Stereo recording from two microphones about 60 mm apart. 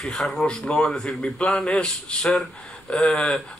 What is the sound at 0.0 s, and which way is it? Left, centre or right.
Speech, centre.